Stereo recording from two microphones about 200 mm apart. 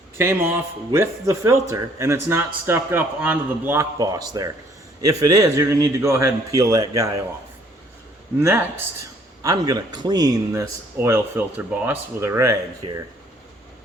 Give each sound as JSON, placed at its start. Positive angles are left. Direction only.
{"t": 0.2, "sound": "a man's voice", "side_deg": -10}
{"t": 8.4, "sound": "a man's voice", "side_deg": -10}